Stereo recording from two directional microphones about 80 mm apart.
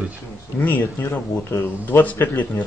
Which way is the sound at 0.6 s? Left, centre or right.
Left.